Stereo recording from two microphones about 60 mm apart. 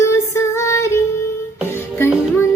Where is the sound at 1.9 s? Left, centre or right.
Left.